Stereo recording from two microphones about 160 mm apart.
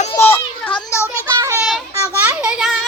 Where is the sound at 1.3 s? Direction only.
20° right (ahead or behind).